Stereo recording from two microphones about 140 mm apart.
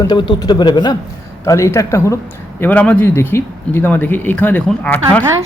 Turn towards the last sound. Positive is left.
turn(degrees=10)  # may be behind; listen again after turning